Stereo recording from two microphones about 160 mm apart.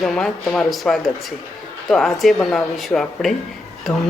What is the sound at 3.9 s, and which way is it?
Speech, 15° left (ahead or behind).